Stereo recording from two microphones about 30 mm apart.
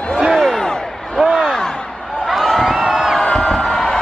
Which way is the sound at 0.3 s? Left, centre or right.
Centre.